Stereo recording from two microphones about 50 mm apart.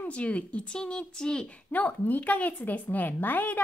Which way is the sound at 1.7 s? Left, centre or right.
Left.